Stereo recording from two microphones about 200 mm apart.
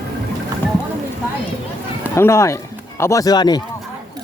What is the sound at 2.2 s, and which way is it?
Speech, 15° left (ahead or behind).